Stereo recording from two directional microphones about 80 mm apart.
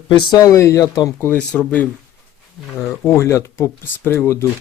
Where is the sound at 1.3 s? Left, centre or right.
Centre.